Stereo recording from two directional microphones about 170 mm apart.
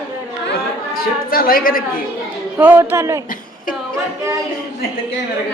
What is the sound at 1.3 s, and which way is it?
Speech, 60° left (ahead or behind).